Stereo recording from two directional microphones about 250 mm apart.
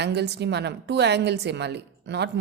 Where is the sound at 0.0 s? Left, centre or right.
Right.